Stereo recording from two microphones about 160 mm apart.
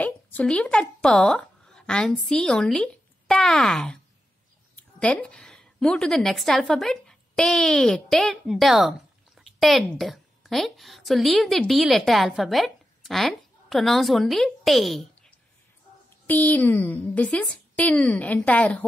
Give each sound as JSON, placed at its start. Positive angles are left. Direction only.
{"t": 0.0, "sound": "a woman's voice", "side_deg": 10}
{"t": 16.3, "sound": "speech", "side_deg": 10}